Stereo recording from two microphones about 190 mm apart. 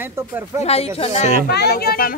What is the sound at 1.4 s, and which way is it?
Speech, 60° left (ahead or behind).